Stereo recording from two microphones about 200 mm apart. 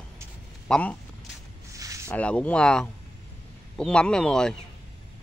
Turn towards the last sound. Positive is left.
turn(degrees=5)  # may be behind; listen again after turning